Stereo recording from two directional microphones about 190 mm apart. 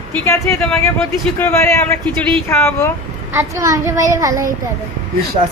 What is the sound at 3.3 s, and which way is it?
A child's voice, 15° right (ahead or behind).